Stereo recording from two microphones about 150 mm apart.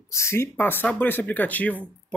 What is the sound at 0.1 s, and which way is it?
Speech, 15° left (ahead or behind).